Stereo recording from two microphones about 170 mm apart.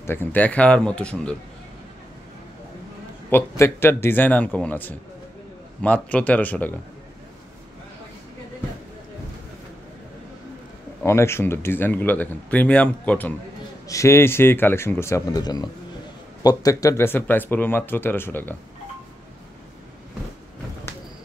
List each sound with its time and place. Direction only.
0.0 s speech: 15° left (ahead or behind)
3.3 s speech: 15° left (ahead or behind)
11.1 s speech: 15° left (ahead or behind)